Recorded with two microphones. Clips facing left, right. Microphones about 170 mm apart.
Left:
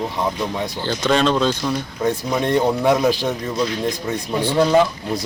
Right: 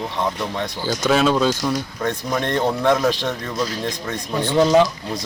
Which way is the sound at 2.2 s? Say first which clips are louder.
Left 2 dB; 10° left (ahead or behind).